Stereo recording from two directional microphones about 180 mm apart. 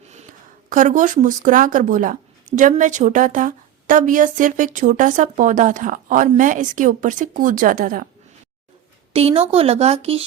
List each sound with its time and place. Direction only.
0.0 s a sound: 40° right (ahead or behind)
0.7 s speech: 45° right (ahead or behind)
9.1 s speech: 35° right (ahead or behind)